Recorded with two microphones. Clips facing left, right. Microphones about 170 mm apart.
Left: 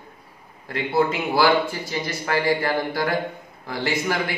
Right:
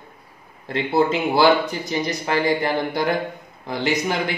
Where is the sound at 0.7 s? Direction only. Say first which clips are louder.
Right 2 dB; 25° right (ahead or behind).